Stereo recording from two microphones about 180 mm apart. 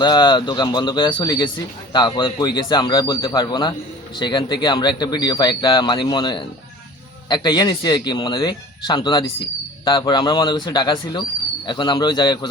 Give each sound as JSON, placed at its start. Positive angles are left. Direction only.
{"t": 0.0, "sound": "speech", "side_deg": 25}